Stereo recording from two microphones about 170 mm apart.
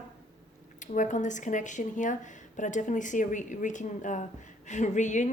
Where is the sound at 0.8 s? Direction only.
45° left (ahead or behind).